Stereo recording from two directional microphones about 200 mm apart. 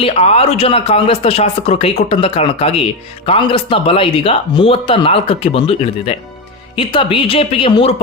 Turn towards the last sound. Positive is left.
turn(degrees=25)  # may be behind; listen again after turning